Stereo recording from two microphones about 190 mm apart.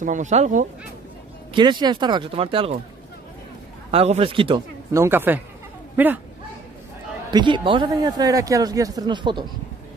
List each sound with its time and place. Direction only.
0.0 s speech: 40° right (ahead or behind)
1.5 s speech: 25° right (ahead or behind)
3.9 s speech: 30° right (ahead or behind)
4.9 s speech: 10° right (ahead or behind)
7.2 s speech: 25° right (ahead or behind)